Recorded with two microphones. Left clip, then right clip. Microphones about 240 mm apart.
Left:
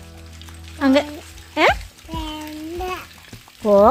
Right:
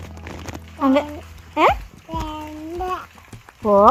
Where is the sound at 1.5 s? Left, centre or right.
Centre.